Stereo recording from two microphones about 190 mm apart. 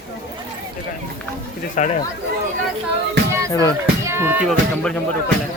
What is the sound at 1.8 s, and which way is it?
Speech, 40° left (ahead or behind).